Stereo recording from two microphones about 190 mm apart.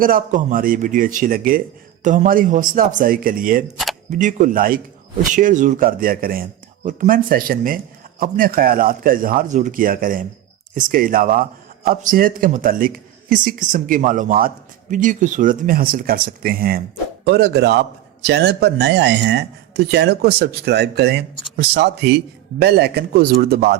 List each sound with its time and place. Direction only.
0.0 s a man's voice: 45° right (ahead or behind)